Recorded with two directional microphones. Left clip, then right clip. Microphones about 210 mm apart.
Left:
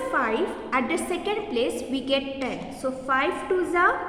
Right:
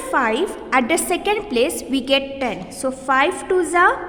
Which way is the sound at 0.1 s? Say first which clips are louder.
Right 7 dB; 50° right (ahead or behind).